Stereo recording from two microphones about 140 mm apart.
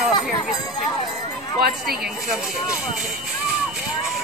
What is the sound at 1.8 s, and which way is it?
Speech, 5° right (ahead or behind).